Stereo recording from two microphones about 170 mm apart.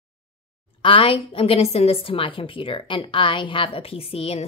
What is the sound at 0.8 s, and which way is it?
A woman's voice, 30° left (ahead or behind).